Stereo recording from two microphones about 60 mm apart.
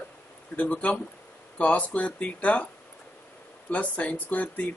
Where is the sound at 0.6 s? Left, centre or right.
Left.